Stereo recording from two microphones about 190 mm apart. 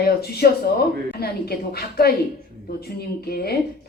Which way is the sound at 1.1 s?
55° left (ahead or behind).